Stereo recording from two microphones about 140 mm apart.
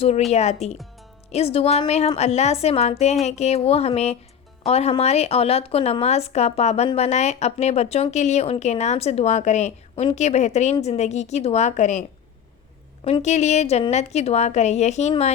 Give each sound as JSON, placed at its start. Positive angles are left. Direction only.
{"t": 0.3, "sound": "a woman's voice", "side_deg": 50}
{"t": 13.2, "sound": "a woman's voice", "side_deg": 55}